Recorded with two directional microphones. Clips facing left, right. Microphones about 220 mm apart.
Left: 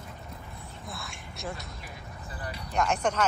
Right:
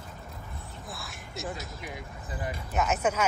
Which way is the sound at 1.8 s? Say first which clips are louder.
Right 4 dB; 15° right (ahead or behind).